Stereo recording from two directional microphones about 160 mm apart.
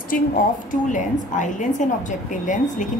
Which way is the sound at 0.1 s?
60° left (ahead or behind).